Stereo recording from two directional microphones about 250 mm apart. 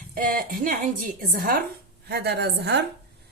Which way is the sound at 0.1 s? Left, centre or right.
Right.